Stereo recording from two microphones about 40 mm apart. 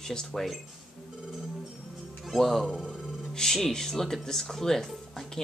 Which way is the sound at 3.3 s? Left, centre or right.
Centre.